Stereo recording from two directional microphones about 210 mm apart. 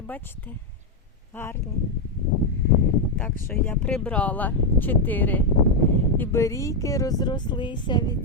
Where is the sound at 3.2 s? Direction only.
10° left (ahead or behind).